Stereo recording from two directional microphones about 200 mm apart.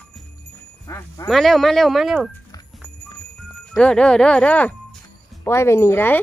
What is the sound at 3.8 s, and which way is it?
Speech, 5° left (ahead or behind).